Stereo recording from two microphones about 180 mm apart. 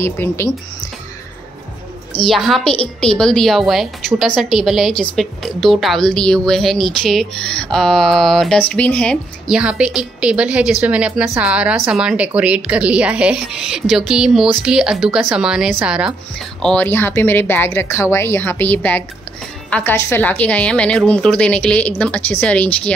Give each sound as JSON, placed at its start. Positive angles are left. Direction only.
{"t": 0.0, "sound": "speech", "side_deg": 15}
{"t": 2.2, "sound": "a woman's voice", "side_deg": 0}
{"t": 9.6, "sound": "a woman's voice", "side_deg": -5}